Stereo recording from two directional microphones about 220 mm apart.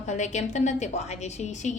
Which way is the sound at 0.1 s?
30° left (ahead or behind).